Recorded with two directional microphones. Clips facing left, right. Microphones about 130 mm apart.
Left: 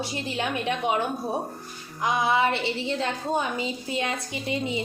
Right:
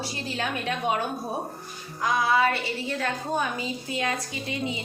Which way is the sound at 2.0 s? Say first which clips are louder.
Even; 20° left (ahead or behind).